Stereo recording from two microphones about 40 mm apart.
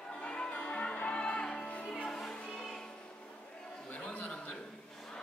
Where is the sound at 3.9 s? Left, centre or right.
Left.